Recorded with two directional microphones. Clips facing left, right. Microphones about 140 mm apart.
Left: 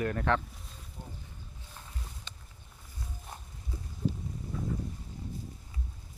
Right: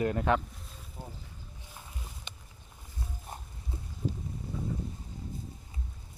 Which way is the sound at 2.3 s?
20° right (ahead or behind).